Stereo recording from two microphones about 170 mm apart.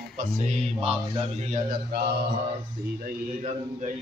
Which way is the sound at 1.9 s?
60° right (ahead or behind).